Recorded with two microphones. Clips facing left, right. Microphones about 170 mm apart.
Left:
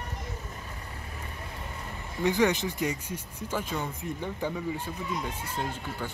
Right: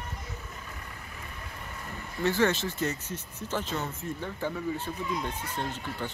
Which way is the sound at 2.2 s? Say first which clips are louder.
Left 1 dB; 15° left (ahead or behind).